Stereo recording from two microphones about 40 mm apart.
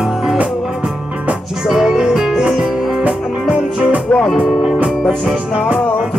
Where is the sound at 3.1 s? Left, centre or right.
Right.